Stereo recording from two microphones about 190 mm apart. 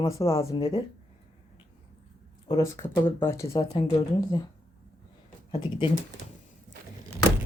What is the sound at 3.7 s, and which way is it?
Speech, 25° left (ahead or behind).